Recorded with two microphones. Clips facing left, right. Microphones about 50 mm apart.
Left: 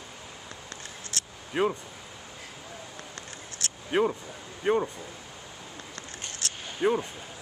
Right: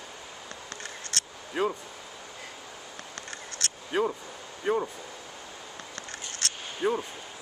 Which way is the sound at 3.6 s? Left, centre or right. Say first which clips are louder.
Right 2 dB; right.